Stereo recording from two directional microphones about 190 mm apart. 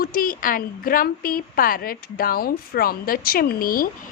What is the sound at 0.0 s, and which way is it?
A woman's voice, 50° left (ahead or behind).